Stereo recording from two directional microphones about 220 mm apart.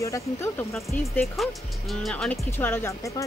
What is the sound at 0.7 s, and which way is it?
Speech, centre (ahead or behind).